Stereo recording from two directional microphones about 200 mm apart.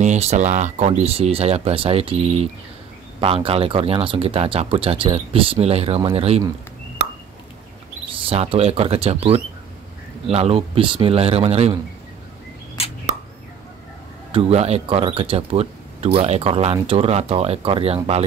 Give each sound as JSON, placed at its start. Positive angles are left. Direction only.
{"t": 0.0, "sound": "speech", "side_deg": -35}
{"t": 8.1, "sound": "speech", "side_deg": -30}
{"t": 14.3, "sound": "speech", "side_deg": -30}